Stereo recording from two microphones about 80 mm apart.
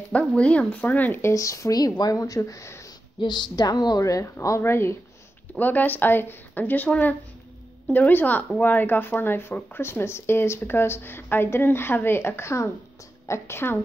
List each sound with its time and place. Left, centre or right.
0.4 s speech: centre
1.2 s a woman's voice: left
3.2 s a woman's voice: left
5.5 s a woman's voice: left